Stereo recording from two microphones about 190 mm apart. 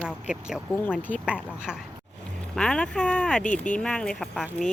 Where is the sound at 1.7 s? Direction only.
5° right (ahead or behind).